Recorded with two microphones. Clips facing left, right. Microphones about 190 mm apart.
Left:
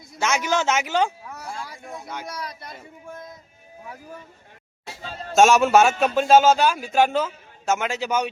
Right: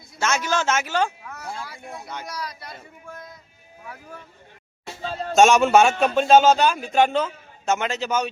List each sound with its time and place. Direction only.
0.2 s speech: 15° left (ahead or behind)
1.9 s speech: centre (ahead or behind)
2.2 s speech: 25° left (ahead or behind)
5.3 s speech: 5° left (ahead or behind)